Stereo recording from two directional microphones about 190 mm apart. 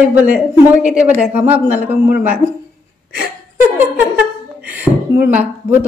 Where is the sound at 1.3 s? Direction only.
10° right (ahead or behind).